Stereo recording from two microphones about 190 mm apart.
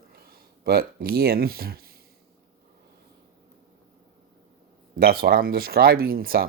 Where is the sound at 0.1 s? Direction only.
50° right (ahead or behind).